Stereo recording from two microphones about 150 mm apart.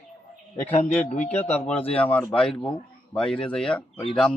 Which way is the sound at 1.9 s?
10° left (ahead or behind).